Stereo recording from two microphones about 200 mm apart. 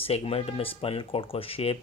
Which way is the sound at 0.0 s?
30° left (ahead or behind).